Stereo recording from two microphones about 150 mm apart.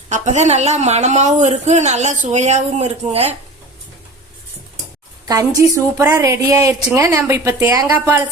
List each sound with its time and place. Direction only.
0.1 s a woman's voice: 50° right (ahead or behind)
5.3 s a woman's voice: 20° right (ahead or behind)